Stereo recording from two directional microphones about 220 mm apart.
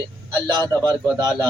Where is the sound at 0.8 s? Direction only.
5° left (ahead or behind).